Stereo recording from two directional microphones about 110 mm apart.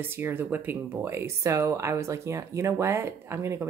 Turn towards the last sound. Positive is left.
turn(degrees=-25)  # may be behind; listen again after turning